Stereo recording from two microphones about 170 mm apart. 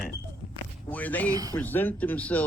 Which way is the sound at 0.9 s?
10° left (ahead or behind).